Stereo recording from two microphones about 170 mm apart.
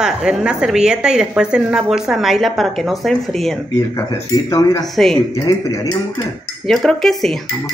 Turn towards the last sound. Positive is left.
turn(degrees=0)  # may be behind; listen again after turning